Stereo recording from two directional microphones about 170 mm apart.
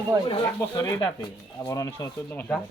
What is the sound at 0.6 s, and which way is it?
Speech, 15° left (ahead or behind).